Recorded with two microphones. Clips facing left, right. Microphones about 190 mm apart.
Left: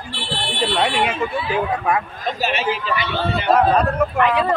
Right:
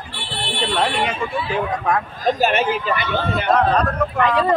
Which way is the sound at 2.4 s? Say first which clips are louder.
Even; 50° right (ahead or behind).